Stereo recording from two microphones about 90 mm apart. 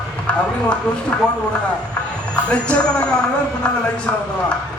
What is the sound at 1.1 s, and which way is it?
Speech, 15° left (ahead or behind).